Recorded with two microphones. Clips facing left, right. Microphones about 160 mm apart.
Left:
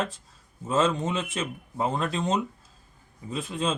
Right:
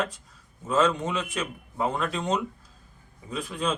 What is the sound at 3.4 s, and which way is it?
Speech, 25° left (ahead or behind).